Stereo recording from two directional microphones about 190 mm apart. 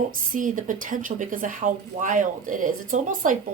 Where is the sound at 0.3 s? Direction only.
45° right (ahead or behind).